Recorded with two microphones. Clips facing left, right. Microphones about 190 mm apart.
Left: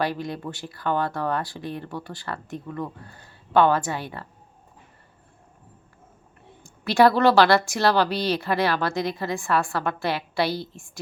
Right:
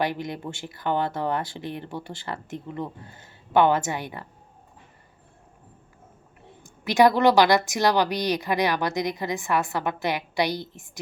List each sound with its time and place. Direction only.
0.0 s speech: 20° right (ahead or behind)
6.6 s a woman's voice: 15° right (ahead or behind)